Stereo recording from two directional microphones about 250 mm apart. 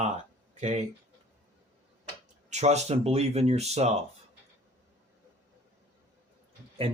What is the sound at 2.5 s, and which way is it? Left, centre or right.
Speech, right.